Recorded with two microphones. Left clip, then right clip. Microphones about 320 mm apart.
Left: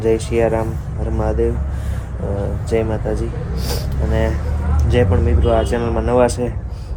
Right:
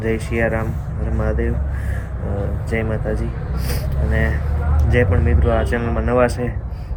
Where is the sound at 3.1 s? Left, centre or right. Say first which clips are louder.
Left 3 dB; left.